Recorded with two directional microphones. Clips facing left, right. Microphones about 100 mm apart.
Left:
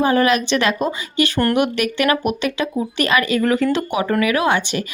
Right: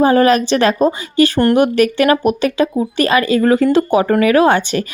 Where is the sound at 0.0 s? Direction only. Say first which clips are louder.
Right 5 dB; 40° right (ahead or behind).